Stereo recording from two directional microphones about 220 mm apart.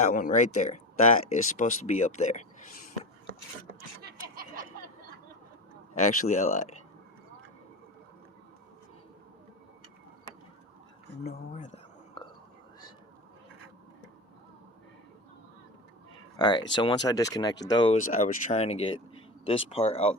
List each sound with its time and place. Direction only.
0.0 s speech: 35° left (ahead or behind)
4.0 s snicker: 40° right (ahead or behind)
6.1 s speech: 30° left (ahead or behind)
11.5 s whispering: 30° left (ahead or behind)
16.4 s speech: 20° left (ahead or behind)
18.1 s speech: 35° left (ahead or behind)